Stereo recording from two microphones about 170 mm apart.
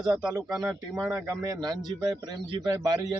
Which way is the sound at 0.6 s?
20° right (ahead or behind).